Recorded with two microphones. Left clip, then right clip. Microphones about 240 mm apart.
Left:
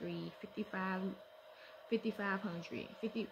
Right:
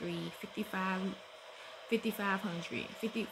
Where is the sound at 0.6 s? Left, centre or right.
Right.